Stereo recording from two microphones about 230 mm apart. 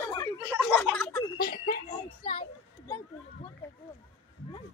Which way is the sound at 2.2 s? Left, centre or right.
Left.